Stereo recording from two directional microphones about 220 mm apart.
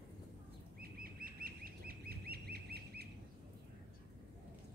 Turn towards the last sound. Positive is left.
turn(degrees=-45)  # may be behind; listen again after turning